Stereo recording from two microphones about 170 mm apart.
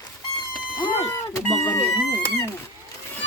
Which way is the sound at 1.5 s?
15° left (ahead or behind).